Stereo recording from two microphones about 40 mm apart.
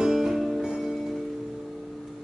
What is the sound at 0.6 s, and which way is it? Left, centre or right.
Music, centre.